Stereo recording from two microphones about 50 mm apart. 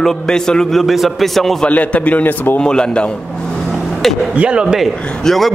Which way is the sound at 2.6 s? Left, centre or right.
Centre.